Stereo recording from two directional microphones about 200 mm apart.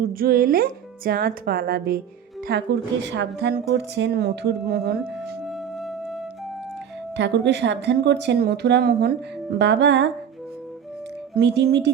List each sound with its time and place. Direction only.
0.0 s speech: 45° right (ahead or behind)
5.1 s music: centre (ahead or behind)
7.2 s speech: 60° right (ahead or behind)
11.3 s speech: 55° right (ahead or behind)